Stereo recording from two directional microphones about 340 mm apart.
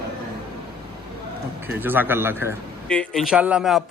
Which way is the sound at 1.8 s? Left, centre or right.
Centre.